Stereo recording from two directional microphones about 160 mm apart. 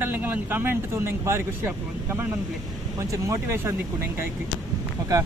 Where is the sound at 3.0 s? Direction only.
20° right (ahead or behind).